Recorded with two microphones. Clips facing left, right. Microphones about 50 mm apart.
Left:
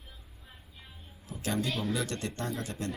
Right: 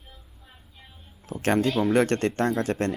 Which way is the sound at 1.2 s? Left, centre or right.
Right.